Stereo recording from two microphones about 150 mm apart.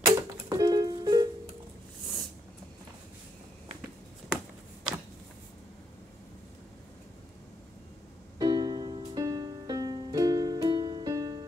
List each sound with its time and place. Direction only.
0.0 s music: 25° right (ahead or behind)
8.4 s music: 25° right (ahead or behind)